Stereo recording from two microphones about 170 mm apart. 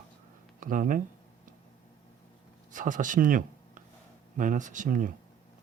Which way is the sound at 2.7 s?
50° right (ahead or behind).